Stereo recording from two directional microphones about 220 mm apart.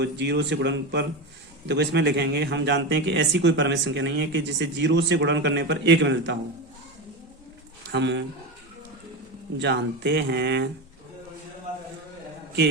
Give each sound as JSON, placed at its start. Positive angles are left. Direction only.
{"t": 0.0, "sound": "a man's voice", "side_deg": -50}
{"t": 7.9, "sound": "a man's voice", "side_deg": -55}
{"t": 9.6, "sound": "a man's voice", "side_deg": -50}